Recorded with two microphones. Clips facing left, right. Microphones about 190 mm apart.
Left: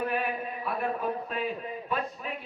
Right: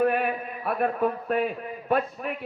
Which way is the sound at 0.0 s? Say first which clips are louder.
Right 6 dB; 60° right (ahead or behind).